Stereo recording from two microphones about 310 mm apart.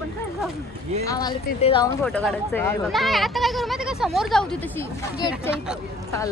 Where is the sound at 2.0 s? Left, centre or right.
Centre.